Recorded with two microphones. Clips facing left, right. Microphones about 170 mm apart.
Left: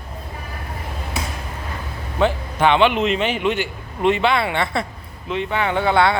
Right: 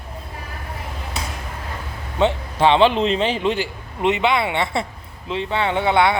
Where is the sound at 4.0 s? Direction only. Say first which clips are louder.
Left 1 dB; 20° right (ahead or behind).